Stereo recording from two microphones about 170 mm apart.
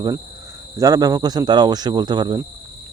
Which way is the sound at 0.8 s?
20° right (ahead or behind).